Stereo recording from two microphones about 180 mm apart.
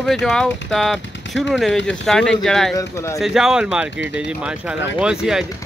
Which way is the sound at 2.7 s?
15° left (ahead or behind).